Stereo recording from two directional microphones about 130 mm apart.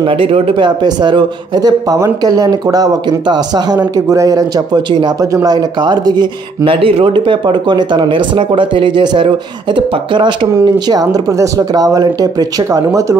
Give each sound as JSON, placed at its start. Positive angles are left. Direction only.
{"t": 0.0, "sound": "a man's voice", "side_deg": -45}
{"t": 10.5, "sound": "speech", "side_deg": -30}